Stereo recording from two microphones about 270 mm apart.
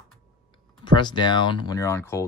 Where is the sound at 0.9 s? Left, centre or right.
Centre.